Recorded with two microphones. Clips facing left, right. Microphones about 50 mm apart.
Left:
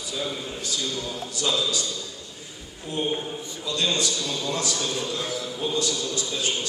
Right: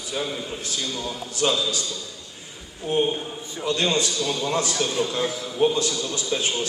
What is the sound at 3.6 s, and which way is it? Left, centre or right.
A man's voice, right.